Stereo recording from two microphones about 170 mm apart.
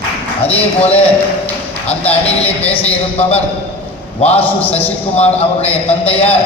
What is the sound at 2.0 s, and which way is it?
Speech, 10° left (ahead or behind).